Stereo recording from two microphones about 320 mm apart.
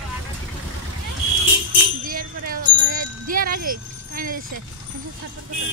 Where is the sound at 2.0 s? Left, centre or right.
Right.